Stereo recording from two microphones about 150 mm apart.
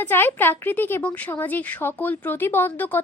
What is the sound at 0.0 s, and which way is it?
A woman's voice, 15° left (ahead or behind).